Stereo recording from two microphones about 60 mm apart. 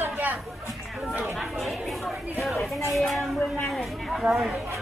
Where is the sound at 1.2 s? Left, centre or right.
Centre.